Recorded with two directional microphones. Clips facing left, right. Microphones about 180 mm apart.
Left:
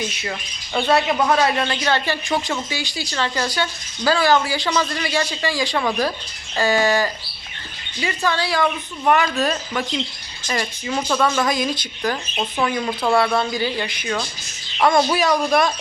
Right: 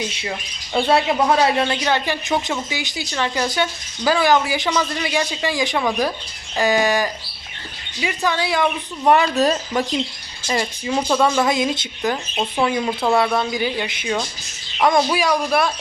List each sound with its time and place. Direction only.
0.3 s a woman's voice: 15° right (ahead or behind); by 9.8 s 35° right (ahead or behind)
10.4 s a woman's voice: 20° right (ahead or behind)
11.4 s a woman's voice: 25° right (ahead or behind)
12.1 s a woman's voice: 10° right (ahead or behind)